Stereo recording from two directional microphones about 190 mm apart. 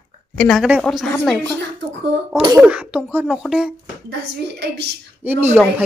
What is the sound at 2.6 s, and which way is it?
A woman's voice, 5° right (ahead or behind).